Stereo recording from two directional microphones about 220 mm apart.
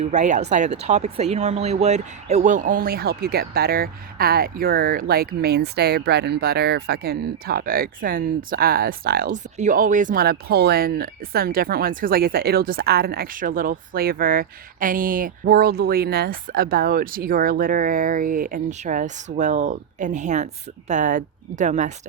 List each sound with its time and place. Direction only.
0.0 s speech: 35° right (ahead or behind)